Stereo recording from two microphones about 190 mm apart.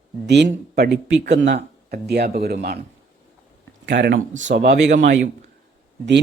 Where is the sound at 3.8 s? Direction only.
65° right (ahead or behind).